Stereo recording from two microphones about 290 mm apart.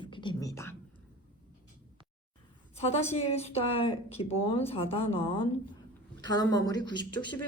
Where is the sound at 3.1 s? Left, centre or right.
Left.